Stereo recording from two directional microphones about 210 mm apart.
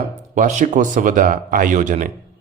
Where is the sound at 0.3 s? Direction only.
35° right (ahead or behind).